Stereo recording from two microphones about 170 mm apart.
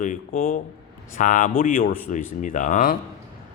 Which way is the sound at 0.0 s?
50° left (ahead or behind).